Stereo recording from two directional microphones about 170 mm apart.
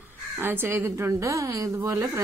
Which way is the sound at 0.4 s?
15° right (ahead or behind).